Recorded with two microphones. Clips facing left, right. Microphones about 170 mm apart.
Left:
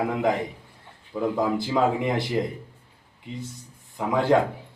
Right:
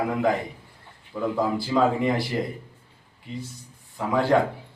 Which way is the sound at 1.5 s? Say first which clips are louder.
Right 1 dB; 20° left (ahead or behind).